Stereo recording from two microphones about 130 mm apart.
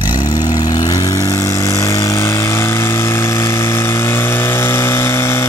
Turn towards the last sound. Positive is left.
turn(degrees=20)  # may be behind; listen again after turning